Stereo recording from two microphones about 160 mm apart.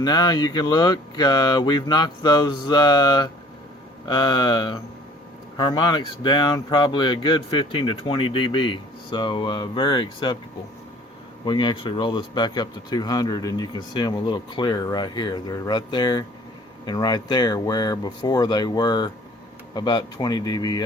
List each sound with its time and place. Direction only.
0.0 s speech: 25° left (ahead or behind)
11.4 s speech: 30° left (ahead or behind)